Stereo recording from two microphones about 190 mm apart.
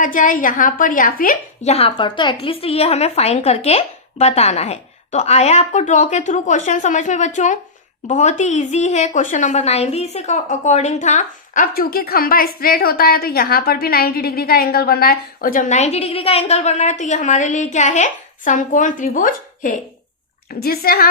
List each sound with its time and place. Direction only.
0.0 s a woman's voice: 45° left (ahead or behind)
1.7 s a woman's voice: 30° left (ahead or behind); by 21.1 s 50° left (ahead or behind)